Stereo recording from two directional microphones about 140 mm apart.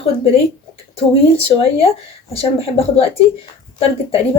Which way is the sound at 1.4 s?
45° left (ahead or behind).